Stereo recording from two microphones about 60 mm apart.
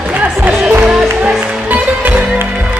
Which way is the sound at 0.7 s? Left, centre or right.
Right.